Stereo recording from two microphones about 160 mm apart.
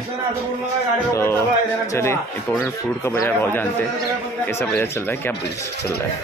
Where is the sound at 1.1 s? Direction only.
15° left (ahead or behind).